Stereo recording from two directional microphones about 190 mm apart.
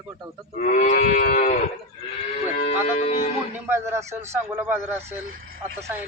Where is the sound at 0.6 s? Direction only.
40° left (ahead or behind).